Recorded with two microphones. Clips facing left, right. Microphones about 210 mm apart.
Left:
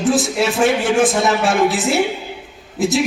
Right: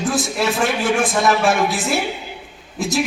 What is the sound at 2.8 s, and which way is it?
Speech, 20° left (ahead or behind).